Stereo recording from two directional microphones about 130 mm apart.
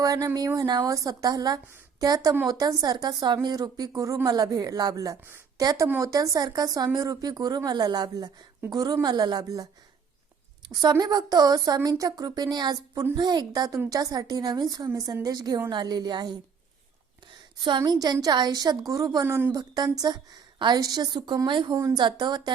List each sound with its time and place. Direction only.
0.0 s a woman's voice: 25° right (ahead or behind)
10.7 s a woman's voice: 30° right (ahead or behind)
17.6 s a woman's voice: 35° right (ahead or behind)